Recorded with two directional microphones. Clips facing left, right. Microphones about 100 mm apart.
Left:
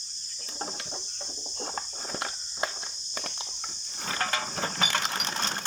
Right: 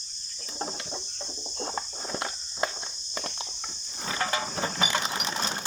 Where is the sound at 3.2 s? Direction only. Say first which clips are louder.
Right 3 dB; 30° right (ahead or behind).